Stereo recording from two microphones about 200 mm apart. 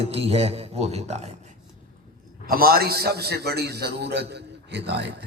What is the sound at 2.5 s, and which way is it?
A man's voice, 50° right (ahead or behind).